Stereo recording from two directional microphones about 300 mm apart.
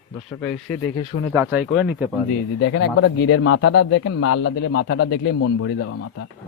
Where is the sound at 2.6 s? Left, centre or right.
Left.